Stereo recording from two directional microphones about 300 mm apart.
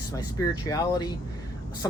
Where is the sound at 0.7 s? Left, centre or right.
Centre.